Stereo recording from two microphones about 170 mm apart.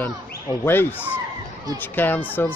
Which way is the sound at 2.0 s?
10° left (ahead or behind).